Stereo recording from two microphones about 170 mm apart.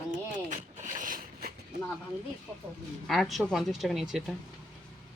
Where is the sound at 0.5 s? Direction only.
50° right (ahead or behind).